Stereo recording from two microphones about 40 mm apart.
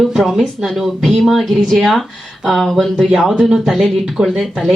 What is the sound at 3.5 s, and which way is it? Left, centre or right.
Speech, centre.